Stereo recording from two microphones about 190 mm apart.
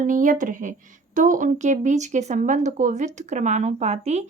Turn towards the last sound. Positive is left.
turn(degrees=-35)  # may be behind; listen again after turning